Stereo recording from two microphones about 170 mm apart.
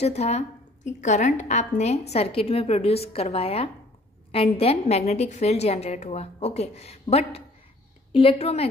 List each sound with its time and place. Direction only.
0.0 s a woman's voice: 40° left (ahead or behind)